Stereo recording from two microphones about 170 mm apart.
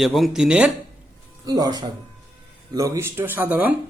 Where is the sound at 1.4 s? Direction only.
20° right (ahead or behind).